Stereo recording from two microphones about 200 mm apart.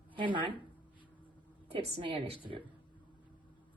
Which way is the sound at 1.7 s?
30° right (ahead or behind).